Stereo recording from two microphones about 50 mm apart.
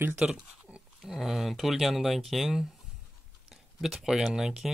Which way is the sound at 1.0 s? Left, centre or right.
Centre.